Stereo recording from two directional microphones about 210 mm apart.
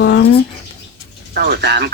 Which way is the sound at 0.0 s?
50° left (ahead or behind).